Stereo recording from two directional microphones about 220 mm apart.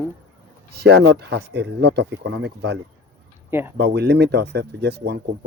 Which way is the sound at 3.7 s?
50° right (ahead or behind).